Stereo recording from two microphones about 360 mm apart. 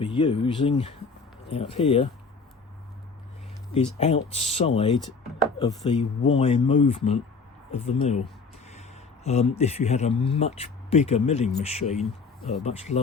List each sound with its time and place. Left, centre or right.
0.0 s speech: centre
3.7 s speech: centre